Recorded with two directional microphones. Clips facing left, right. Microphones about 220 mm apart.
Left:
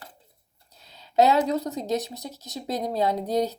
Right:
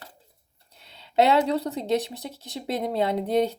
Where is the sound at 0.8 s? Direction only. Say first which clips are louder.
Left 1 dB; 30° right (ahead or behind).